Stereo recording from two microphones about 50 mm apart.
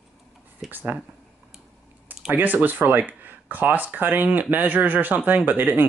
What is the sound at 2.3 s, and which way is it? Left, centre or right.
Speech, right.